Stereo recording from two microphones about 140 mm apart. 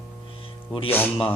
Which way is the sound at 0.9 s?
15° left (ahead or behind).